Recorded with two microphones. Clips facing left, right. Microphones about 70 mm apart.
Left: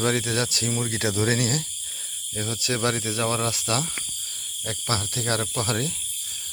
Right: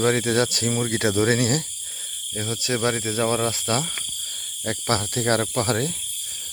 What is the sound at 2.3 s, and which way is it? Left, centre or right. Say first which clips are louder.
Speech: right 2 dB; right.